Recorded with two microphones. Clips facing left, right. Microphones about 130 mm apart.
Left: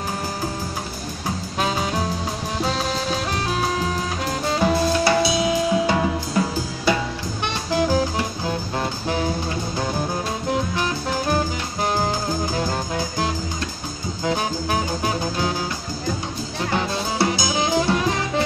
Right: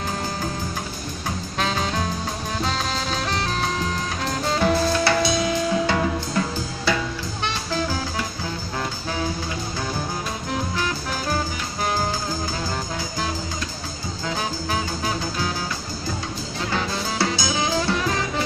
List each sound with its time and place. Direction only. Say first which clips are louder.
1.6 s music: left 1 dB; 10° left (ahead or behind)
4.6 s music: left 1 dB; 10° left (ahead or behind)
7.7 s music: left 8 dB; 20° left (ahead or behind)
16.7 s music: left 2 dB; 20° left (ahead or behind)